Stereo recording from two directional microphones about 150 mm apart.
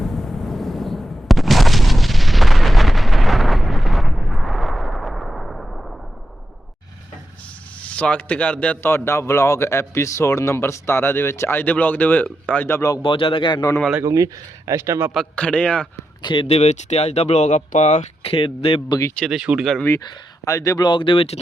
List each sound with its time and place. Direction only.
0.0 s a sound: centre (ahead or behind)
7.8 s a man's voice: 10° left (ahead or behind)
13.0 s a man's voice: 35° left (ahead or behind)
14.0 s speech: 20° right (ahead or behind)
15.1 s a man's voice: 5° left (ahead or behind)
16.2 s speech: 35° left (ahead or behind)
19.2 s speech: 5° right (ahead or behind)
20.4 s speech: 20° left (ahead or behind); by 21.3 s 35° left (ahead or behind)